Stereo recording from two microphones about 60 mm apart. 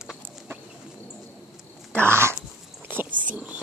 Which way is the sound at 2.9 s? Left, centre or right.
Right.